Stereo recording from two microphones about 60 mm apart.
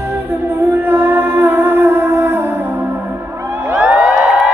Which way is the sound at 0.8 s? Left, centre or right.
Right.